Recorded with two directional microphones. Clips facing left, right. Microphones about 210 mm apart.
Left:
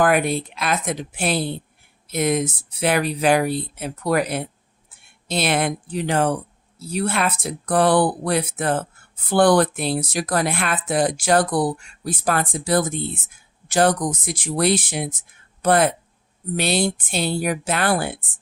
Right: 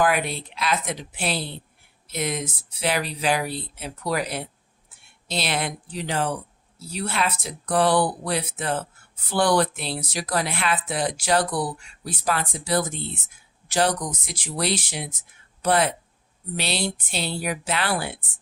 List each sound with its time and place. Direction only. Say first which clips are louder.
0.0 s speech: left 4 dB; 50° left (ahead or behind)